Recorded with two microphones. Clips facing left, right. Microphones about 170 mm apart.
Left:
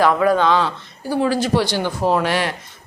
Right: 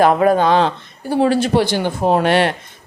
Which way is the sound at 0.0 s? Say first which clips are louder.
Right 3 dB; 50° right (ahead or behind).